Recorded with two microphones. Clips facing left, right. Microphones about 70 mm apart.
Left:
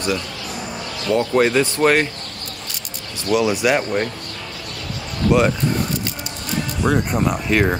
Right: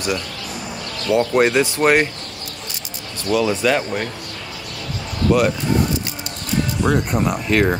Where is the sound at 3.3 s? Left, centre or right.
Centre.